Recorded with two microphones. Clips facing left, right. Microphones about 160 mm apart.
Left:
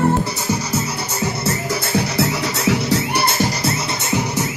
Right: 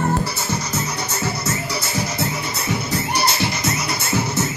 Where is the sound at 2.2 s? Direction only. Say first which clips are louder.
Left 5 dB; 80° left; by 3.5 s 55° left (ahead or behind).